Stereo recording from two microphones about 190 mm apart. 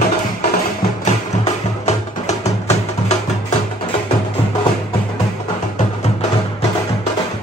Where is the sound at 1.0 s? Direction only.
35° left (ahead or behind).